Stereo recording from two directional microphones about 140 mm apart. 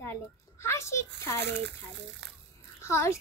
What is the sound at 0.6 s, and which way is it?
Speech, 20° left (ahead or behind).